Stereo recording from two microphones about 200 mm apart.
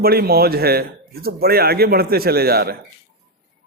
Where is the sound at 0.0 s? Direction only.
50° right (ahead or behind).